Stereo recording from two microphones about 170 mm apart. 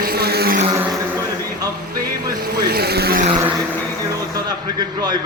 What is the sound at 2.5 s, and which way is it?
Speech, 70° right (ahead or behind).